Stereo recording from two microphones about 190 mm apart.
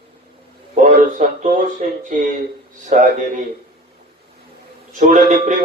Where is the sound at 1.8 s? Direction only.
40° right (ahead or behind).